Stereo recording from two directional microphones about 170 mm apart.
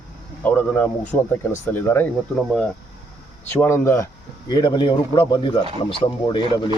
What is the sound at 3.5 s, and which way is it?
Speech, 15° left (ahead or behind).